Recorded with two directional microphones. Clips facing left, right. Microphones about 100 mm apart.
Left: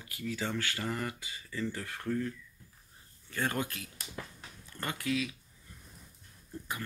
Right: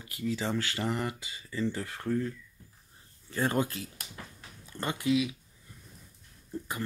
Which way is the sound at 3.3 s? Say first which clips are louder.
Right 5 dB; 30° right (ahead or behind).